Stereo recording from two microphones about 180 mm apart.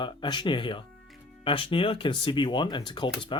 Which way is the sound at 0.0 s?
25° left (ahead or behind).